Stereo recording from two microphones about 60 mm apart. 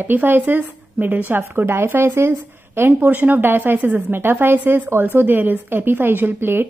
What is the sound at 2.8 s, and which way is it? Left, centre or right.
Speech, right.